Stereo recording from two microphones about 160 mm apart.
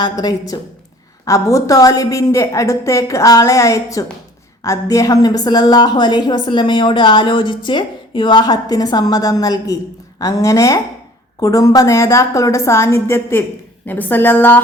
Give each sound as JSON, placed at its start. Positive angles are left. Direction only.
{"t": 0.0, "sound": "a woman's voice", "side_deg": 25}